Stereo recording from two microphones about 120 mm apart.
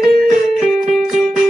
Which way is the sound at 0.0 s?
Centre (ahead or behind).